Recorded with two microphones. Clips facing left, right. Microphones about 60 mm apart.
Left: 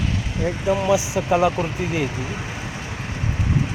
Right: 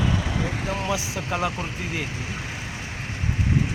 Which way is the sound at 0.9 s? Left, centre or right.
Centre.